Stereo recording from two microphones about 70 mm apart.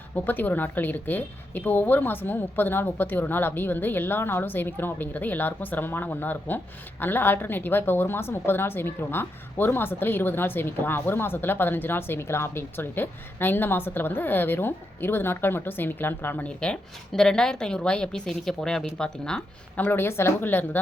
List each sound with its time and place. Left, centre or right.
0.3 s a woman's voice: left
17.1 s a woman's voice: centre
19.7 s a woman's voice: left